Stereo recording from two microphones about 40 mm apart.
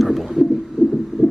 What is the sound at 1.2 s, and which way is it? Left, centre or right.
Music, centre.